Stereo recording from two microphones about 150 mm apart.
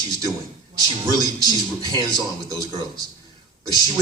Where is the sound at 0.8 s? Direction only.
25° right (ahead or behind).